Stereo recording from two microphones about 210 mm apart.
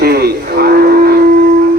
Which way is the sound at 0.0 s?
50° right (ahead or behind).